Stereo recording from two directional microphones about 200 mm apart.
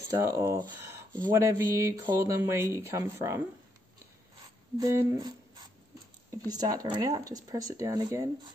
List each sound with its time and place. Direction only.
0.1 s speech: 15° right (ahead or behind)
4.7 s speech: 15° right (ahead or behind)